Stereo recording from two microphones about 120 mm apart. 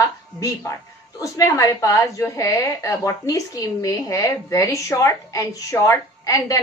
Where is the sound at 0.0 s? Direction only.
25° left (ahead or behind).